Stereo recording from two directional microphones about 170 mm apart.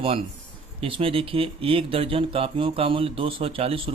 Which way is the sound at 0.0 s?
35° right (ahead or behind).